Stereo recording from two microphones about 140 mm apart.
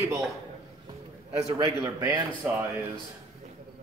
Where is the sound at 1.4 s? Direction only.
30° right (ahead or behind).